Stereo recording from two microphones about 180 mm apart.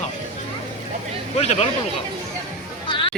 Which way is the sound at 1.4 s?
35° left (ahead or behind).